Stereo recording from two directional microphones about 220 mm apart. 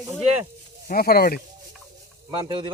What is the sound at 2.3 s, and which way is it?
Speech, 20° right (ahead or behind).